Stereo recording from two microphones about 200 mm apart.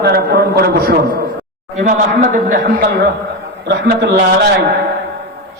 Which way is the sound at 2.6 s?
55° right (ahead or behind).